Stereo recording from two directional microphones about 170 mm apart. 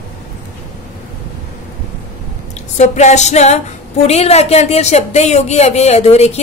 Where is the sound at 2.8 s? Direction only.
40° left (ahead or behind).